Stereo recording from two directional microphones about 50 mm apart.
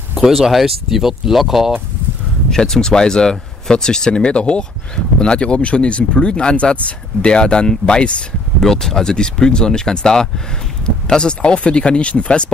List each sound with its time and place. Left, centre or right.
0.1 s speech: centre
2.5 s speech: centre
8.5 s speech: centre